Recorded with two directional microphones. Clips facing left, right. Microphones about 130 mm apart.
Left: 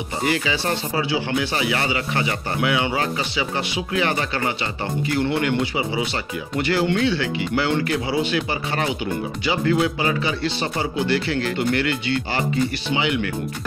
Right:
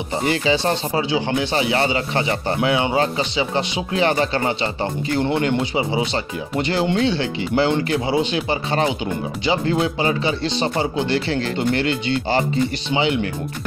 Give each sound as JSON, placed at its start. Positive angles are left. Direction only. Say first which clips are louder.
{"t": 0.2, "sound": "speech", "louder": "right 3 dB", "side_deg": -30}